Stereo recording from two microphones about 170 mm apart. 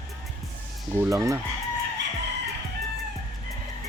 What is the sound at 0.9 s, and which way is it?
Chicken, 20° right (ahead or behind).